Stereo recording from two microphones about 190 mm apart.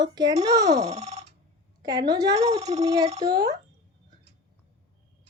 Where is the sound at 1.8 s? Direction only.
20° right (ahead or behind).